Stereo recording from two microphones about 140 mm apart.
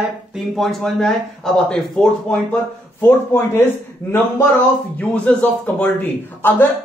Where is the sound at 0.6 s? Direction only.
Centre (ahead or behind).